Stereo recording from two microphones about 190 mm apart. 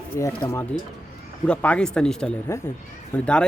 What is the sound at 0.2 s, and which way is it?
Speech, 15° left (ahead or behind).